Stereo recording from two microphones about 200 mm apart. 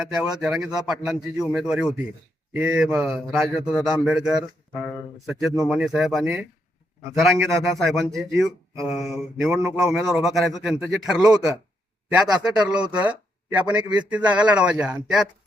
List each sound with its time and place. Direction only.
0.1 s a man's voice: 5° right (ahead or behind)